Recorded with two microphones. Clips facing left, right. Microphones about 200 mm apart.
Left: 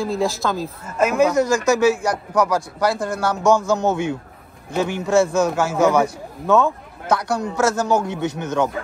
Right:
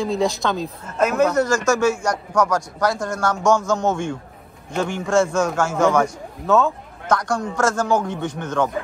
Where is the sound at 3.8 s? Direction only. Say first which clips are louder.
Left 2 dB; 60° left (ahead or behind).